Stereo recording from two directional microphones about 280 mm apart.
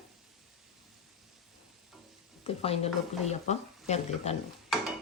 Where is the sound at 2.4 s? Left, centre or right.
Left.